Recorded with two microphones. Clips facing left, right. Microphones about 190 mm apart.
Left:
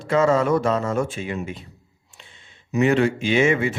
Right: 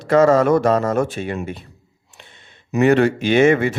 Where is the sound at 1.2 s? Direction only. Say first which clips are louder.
Right 3 dB; 60° right (ahead or behind).